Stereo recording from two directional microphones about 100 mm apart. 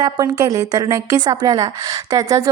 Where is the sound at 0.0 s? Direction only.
35° right (ahead or behind).